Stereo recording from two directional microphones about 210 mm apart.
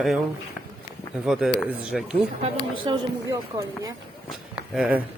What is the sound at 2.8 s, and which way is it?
Speech, 20° right (ahead or behind).